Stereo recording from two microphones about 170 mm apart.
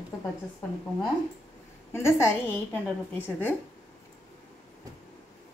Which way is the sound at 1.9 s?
15° left (ahead or behind).